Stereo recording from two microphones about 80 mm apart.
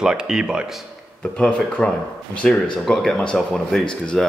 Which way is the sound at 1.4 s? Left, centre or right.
Centre.